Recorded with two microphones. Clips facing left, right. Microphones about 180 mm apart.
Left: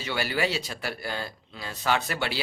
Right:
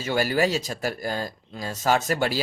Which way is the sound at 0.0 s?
45° right (ahead or behind).